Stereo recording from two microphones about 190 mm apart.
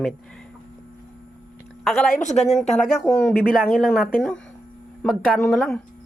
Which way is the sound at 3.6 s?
Centre (ahead or behind).